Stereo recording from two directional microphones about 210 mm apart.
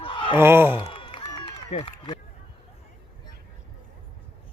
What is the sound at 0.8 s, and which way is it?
Run, 25° left (ahead or behind).